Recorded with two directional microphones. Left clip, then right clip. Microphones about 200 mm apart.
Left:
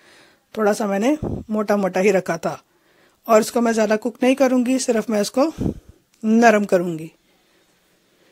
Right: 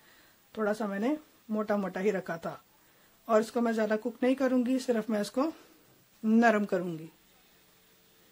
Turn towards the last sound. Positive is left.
turn(degrees=40)  # may be behind; listen again after turning